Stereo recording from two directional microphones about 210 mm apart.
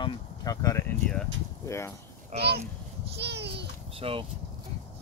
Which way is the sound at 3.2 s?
55° right (ahead or behind).